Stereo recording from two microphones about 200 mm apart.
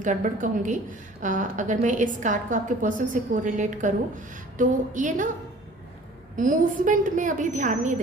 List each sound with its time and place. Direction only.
0.0 s a woman's voice: 40° right (ahead or behind)
6.3 s a woman's voice: 40° right (ahead or behind)